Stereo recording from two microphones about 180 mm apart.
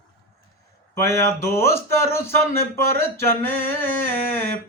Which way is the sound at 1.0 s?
15° left (ahead or behind).